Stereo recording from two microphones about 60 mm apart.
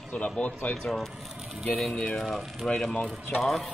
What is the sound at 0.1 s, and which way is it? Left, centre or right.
Speech, left.